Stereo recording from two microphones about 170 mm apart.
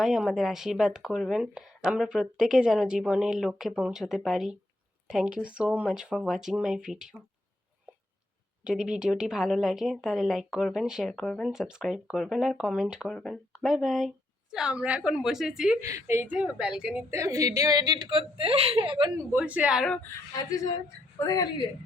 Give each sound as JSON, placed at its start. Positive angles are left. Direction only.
{"t": 0.0, "sound": "a woman's voice", "side_deg": 0}
{"t": 8.6, "sound": "a woman's voice", "side_deg": -5}
{"t": 15.8, "sound": "a woman's voice", "side_deg": -20}
{"t": 17.2, "sound": "a woman's voice", "side_deg": -20}
{"t": 19.3, "sound": "a woman's voice", "side_deg": -10}
{"t": 20.3, "sound": "a woman's voice", "side_deg": 20}